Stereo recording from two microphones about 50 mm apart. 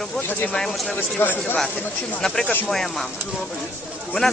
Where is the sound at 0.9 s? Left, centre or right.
Left.